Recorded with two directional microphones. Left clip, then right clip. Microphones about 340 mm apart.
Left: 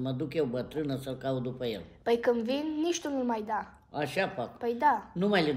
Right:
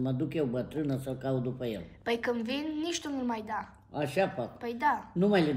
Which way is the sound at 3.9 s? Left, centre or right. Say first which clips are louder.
Right 1 dB; centre.